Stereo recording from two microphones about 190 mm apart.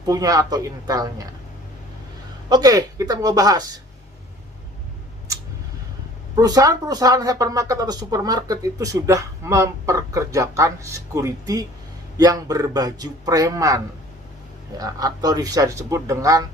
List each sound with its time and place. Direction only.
0.0 s a man's voice: 20° right (ahead or behind)
2.5 s a man's voice: 20° right (ahead or behind)
6.3 s a man's voice: 20° right (ahead or behind)